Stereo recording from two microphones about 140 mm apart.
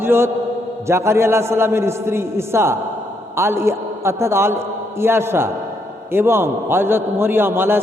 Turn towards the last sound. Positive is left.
turn(degrees=-15)  # may be behind; listen again after turning